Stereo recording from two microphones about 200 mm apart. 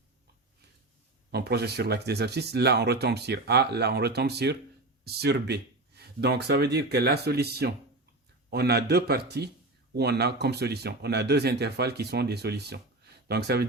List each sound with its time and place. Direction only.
1.3 s a man's voice: 55° right (ahead or behind)